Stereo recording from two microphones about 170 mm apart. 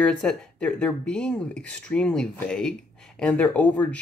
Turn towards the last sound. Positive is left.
turn(degrees=10)  # may be behind; listen again after turning